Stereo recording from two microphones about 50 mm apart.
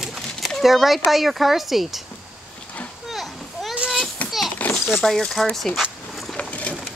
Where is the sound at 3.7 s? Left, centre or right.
Centre.